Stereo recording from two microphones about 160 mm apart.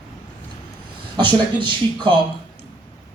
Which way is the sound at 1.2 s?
30° right (ahead or behind).